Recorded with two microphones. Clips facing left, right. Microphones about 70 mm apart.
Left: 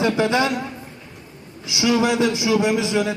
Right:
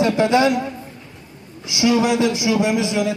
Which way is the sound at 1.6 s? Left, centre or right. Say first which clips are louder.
Right 2 dB; right.